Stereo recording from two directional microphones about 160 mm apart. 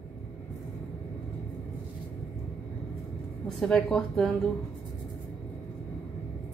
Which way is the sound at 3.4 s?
5° left (ahead or behind).